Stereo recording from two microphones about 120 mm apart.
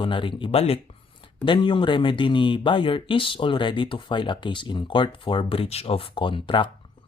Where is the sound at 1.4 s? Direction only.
40° left (ahead or behind).